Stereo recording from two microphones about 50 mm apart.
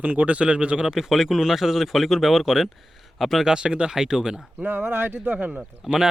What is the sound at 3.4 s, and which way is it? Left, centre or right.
Speech, centre.